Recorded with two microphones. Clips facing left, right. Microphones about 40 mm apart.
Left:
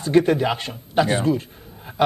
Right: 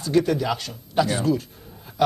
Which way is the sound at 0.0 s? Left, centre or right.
Left.